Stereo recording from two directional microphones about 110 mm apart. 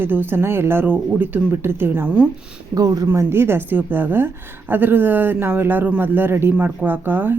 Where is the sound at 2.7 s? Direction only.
35° right (ahead or behind).